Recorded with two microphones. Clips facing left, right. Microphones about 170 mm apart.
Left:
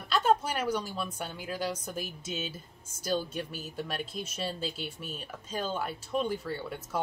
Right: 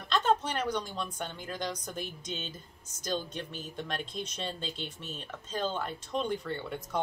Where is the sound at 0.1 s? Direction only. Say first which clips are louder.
Left 2 dB; 10° left (ahead or behind).